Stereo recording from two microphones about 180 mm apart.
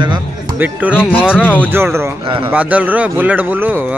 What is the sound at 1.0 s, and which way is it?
Speech, 10° left (ahead or behind).